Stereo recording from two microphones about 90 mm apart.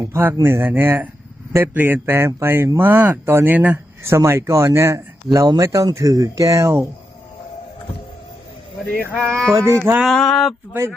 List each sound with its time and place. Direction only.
0.0 s speech: 30° right (ahead or behind)
3.5 s speech: 15° right (ahead or behind)
4.0 s speech: 30° right (ahead or behind)
9.1 s a sound: 5° left (ahead or behind)
9.5 s speech: 30° right (ahead or behind)
10.1 s a sound: centre (ahead or behind)
10.7 s speech: 30° right (ahead or behind)